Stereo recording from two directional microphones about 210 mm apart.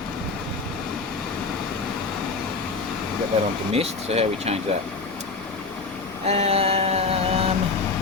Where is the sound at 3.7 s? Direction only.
30° right (ahead or behind).